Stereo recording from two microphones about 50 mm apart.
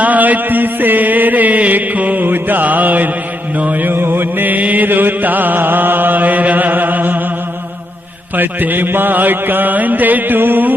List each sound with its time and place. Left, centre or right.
0.0 s chant: right
3.6 s mantra: right
8.4 s chant: right